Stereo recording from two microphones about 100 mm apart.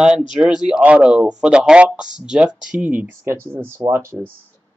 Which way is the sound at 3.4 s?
25° right (ahead or behind).